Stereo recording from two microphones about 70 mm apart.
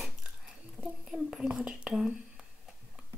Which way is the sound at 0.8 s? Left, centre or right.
Right.